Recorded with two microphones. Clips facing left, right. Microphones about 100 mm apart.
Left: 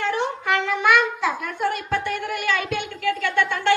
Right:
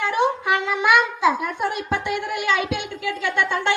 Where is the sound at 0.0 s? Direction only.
15° right (ahead or behind).